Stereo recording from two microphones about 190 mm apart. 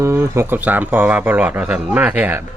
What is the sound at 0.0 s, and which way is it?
Speech, 15° right (ahead or behind).